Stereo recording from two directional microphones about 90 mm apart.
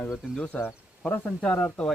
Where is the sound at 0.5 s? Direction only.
20° left (ahead or behind).